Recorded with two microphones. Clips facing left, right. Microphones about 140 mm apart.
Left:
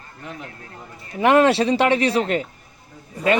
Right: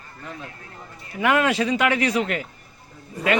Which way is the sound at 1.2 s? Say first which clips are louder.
Left 5 dB; 35° left (ahead or behind).